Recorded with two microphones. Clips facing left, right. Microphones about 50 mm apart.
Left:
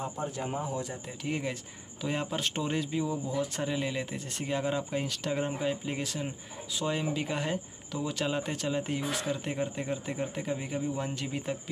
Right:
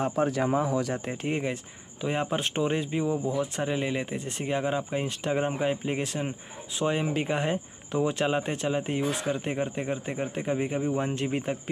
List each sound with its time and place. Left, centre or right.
0.0 s speech: right
1.2 s speech: right